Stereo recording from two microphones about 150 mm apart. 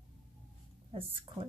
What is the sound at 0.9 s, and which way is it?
Speech, 40° right (ahead or behind).